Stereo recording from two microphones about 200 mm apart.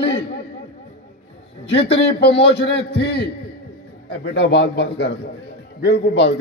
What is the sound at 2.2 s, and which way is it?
A man's voice, 60° left (ahead or behind).